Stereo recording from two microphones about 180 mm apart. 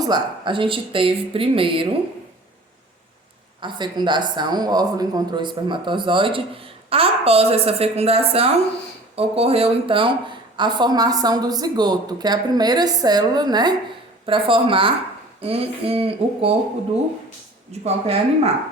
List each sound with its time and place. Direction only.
0.0 s speech: 25° right (ahead or behind)
3.6 s speech: 25° right (ahead or behind)
17.7 s speech: 35° right (ahead or behind)